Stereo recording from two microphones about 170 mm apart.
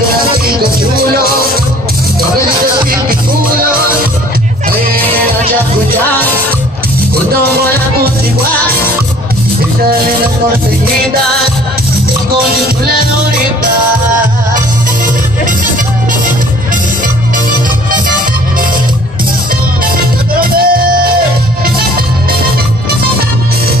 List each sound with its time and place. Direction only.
1.1 s music: 60° right (ahead or behind)
2.6 s music: 55° right (ahead or behind)
6.0 s music: 10° left (ahead or behind)
20.3 s music: 60° right (ahead or behind)